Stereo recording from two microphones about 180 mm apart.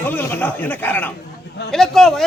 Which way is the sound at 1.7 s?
Centre (ahead or behind).